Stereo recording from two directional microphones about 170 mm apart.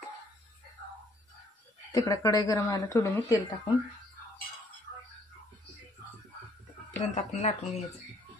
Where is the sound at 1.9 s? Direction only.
20° left (ahead or behind).